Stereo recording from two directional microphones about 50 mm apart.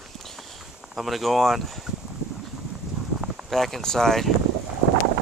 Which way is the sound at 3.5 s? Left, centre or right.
Centre.